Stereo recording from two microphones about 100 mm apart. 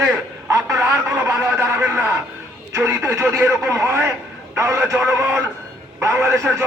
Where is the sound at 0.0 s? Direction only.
30° right (ahead or behind).